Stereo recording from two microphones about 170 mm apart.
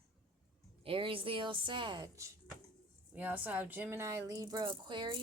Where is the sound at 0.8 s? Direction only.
30° right (ahead or behind).